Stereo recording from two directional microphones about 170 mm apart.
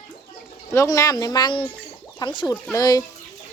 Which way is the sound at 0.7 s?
15° left (ahead or behind).